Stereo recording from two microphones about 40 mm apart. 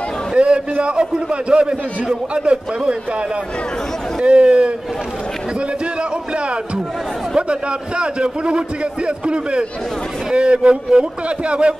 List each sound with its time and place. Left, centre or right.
0.4 s a man's voice: right
7.3 s a man's voice: right